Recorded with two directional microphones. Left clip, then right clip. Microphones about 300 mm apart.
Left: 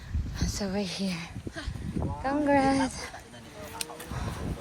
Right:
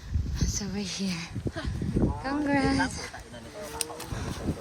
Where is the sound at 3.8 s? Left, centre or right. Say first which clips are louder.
Right 1 dB; right.